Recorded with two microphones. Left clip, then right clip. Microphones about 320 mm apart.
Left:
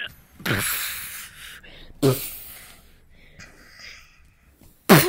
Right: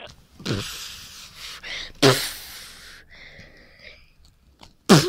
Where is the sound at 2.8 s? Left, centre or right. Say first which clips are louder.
Right 12 dB; right.